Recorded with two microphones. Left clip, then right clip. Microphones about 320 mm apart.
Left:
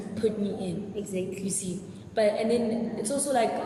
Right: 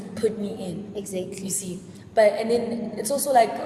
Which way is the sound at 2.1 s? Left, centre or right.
Centre.